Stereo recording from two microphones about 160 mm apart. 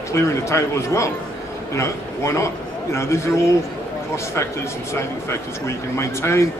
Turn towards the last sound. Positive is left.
turn(degrees=15)  # may be behind; listen again after turning